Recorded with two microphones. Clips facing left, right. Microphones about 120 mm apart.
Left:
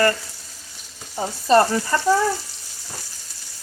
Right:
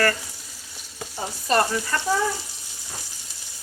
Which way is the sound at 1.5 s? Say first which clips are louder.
Left 6 dB; 30° left (ahead or behind).